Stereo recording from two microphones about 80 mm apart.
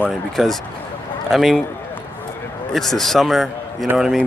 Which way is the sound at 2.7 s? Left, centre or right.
Centre.